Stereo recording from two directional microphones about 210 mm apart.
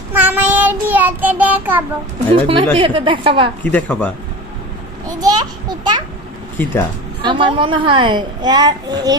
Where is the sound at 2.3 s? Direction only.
25° right (ahead or behind).